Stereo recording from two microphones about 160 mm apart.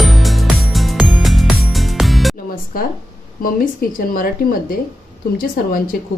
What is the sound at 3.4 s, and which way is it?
Speech, 65° left (ahead or behind).